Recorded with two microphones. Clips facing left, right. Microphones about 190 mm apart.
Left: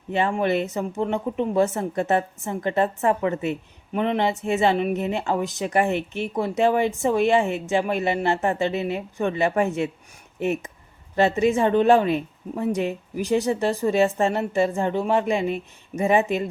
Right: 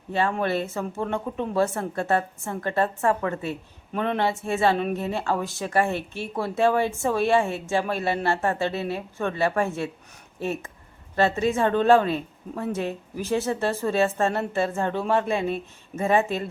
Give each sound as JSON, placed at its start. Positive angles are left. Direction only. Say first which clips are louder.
{"t": 0.1, "sound": "speech", "louder": "left 2 dB", "side_deg": 15}